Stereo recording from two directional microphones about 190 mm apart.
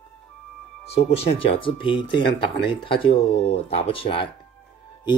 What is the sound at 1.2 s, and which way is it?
Speech, 30° left (ahead or behind).